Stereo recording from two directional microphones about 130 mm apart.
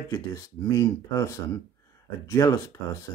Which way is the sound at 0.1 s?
25° left (ahead or behind).